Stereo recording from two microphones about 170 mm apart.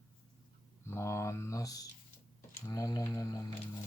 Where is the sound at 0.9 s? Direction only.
15° left (ahead or behind).